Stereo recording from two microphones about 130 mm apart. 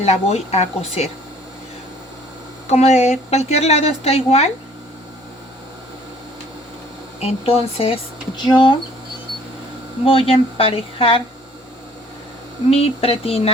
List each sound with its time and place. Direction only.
0.0 s a woman's voice: 55° left (ahead or behind)
2.6 s a woman's voice: 60° left (ahead or behind)
7.2 s speech: 50° left (ahead or behind)
8.4 s speech: 35° left (ahead or behind)
10.1 s speech: 45° left (ahead or behind)
12.7 s speech: 50° left (ahead or behind)